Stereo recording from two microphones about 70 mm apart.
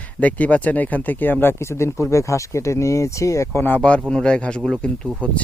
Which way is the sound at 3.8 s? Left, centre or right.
Centre.